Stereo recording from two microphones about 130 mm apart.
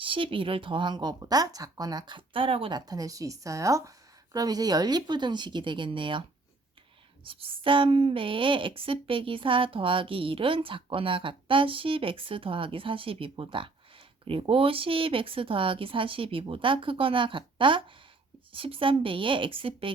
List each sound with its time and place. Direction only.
0.0 s speech: 40° right (ahead or behind)
7.3 s a woman's voice: 45° right (ahead or behind)